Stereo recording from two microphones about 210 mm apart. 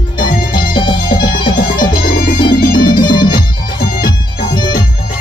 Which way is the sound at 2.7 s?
40° left (ahead or behind).